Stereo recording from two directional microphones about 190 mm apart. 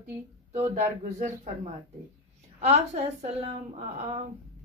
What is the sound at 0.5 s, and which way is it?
Speech, 35° right (ahead or behind).